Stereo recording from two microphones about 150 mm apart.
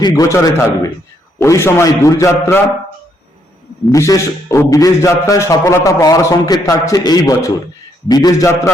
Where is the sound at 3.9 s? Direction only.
20° left (ahead or behind).